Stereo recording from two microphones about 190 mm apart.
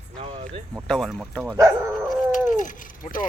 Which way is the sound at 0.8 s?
Centre (ahead or behind).